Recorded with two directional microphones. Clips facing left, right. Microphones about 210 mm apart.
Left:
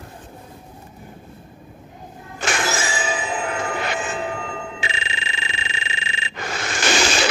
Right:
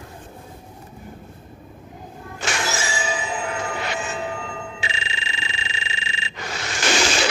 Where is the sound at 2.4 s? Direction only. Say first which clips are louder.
Left 3 dB; 50° left (ahead or behind).